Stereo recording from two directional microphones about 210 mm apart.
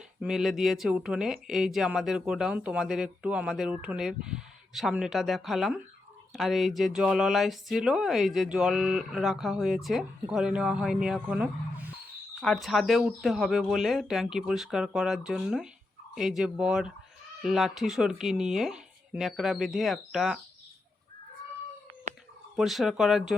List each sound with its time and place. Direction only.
0.2 s speech: centre (ahead or behind)
22.5 s speech: centre (ahead or behind)